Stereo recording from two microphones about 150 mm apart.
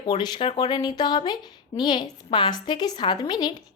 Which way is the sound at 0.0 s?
35° left (ahead or behind).